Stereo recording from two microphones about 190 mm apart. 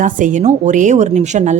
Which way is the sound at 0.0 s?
40° right (ahead or behind).